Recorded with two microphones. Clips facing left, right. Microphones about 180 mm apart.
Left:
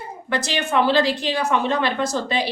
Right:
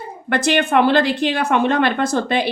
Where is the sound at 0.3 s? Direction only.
55° right (ahead or behind).